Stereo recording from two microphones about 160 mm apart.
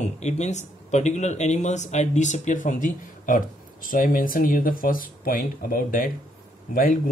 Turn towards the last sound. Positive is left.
turn(degrees=60)  # may be behind; listen again after turning